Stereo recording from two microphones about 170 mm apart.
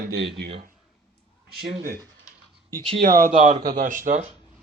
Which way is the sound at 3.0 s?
55° right (ahead or behind).